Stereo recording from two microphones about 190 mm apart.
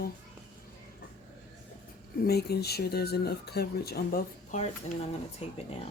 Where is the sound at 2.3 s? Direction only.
55° left (ahead or behind).